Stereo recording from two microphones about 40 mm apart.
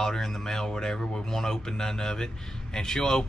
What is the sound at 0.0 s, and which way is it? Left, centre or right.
Speech, centre.